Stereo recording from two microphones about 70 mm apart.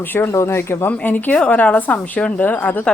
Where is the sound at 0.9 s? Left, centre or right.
Left.